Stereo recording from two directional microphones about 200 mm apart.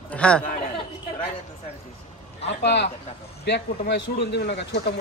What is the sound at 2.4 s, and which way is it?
Speech, 60° left (ahead or behind).